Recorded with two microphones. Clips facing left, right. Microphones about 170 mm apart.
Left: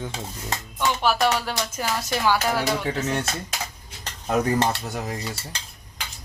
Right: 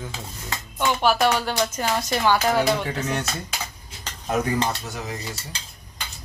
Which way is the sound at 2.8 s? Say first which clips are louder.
Left 1 dB; 30° left (ahead or behind).